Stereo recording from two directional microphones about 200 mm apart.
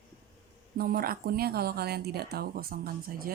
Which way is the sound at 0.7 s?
45° right (ahead or behind).